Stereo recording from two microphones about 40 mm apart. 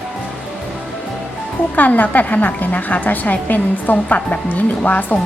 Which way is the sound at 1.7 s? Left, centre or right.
Left.